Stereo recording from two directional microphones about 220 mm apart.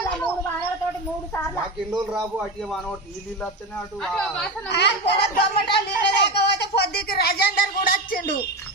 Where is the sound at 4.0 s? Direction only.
Centre (ahead or behind).